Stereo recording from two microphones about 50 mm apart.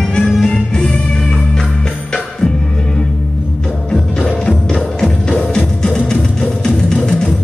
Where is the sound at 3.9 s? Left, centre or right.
Centre.